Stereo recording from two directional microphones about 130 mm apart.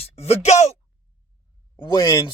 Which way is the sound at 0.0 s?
50° left (ahead or behind).